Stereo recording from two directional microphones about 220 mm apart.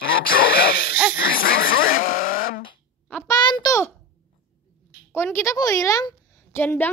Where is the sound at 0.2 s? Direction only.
40° left (ahead or behind).